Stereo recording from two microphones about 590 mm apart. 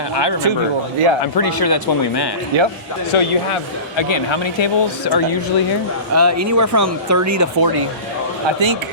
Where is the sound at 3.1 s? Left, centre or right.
Left.